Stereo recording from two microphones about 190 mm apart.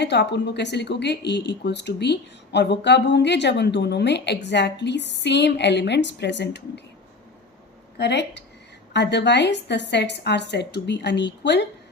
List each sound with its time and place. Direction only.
0.0 s speech: 65° left (ahead or behind)
7.9 s speech: 65° left (ahead or behind)